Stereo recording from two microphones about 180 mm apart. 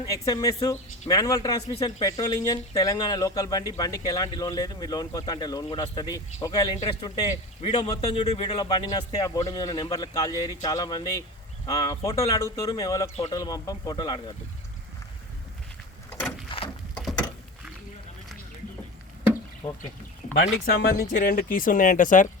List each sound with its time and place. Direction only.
0.0 s speech: 20° left (ahead or behind)
16.5 s a sound: 30° left (ahead or behind)
19.6 s speech: 20° left (ahead or behind)
20.3 s speech: 65° left (ahead or behind); by 22.3 s 45° left (ahead or behind)